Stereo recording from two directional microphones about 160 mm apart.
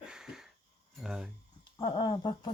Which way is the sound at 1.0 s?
5° right (ahead or behind).